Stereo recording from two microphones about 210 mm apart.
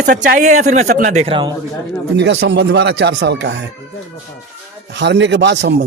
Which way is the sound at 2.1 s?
60° right (ahead or behind).